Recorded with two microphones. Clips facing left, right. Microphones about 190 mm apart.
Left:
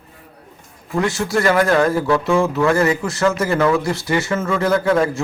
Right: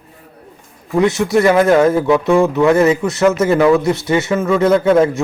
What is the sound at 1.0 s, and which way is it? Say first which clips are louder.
Speech: right 6 dB; 20° right (ahead or behind).